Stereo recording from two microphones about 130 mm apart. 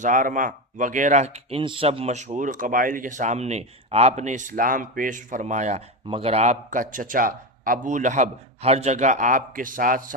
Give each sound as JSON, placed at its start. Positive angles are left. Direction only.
{"t": 0.0, "sound": "speech", "side_deg": -85}
{"t": 6.1, "sound": "speech", "side_deg": -50}